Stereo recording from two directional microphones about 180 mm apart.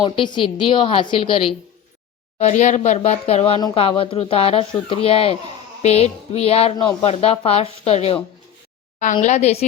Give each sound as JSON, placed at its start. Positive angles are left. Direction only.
{"t": 0.0, "sound": "a woman's voice", "side_deg": 25}
{"t": 2.4, "sound": "speech", "side_deg": 40}
{"t": 9.2, "sound": "speech", "side_deg": 40}